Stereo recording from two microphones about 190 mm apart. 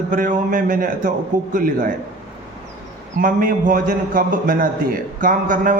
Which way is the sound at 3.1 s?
45° right (ahead or behind).